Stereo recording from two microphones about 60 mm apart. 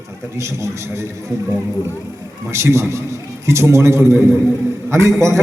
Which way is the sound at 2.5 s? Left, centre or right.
Right.